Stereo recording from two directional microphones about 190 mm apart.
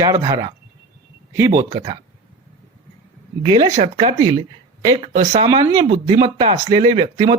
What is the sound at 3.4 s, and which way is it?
Speech, 25° right (ahead or behind).